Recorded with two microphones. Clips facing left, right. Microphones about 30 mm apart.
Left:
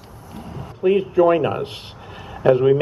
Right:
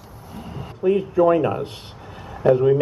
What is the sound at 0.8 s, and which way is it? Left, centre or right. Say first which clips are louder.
Speech: left 2 dB; left.